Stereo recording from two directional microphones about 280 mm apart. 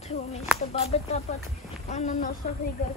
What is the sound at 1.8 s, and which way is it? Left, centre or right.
Speech, left.